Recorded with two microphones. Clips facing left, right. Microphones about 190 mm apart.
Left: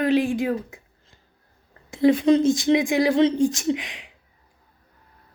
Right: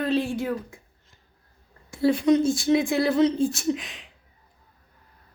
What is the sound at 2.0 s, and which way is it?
A woman's voice, 25° left (ahead or behind).